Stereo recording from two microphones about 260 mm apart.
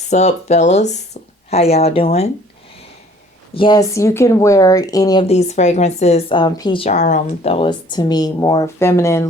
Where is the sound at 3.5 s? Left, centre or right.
Centre.